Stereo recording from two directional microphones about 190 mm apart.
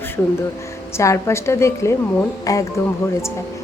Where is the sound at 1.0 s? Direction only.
15° left (ahead or behind).